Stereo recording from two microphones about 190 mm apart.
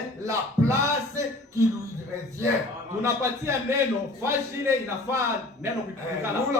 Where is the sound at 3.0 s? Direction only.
15° right (ahead or behind).